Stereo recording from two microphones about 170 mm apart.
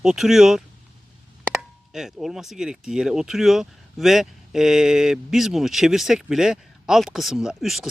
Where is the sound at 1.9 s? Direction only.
5° right (ahead or behind).